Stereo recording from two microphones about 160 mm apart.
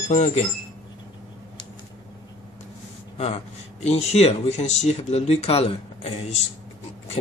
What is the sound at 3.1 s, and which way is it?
Speech, 40° left (ahead or behind).